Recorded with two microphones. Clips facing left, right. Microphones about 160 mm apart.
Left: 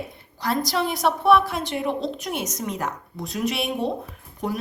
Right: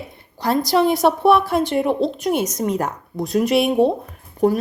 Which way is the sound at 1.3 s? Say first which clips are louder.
Right 4 dB; 55° right (ahead or behind).